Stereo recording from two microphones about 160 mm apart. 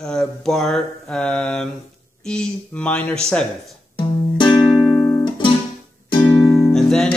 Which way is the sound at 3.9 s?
30° left (ahead or behind).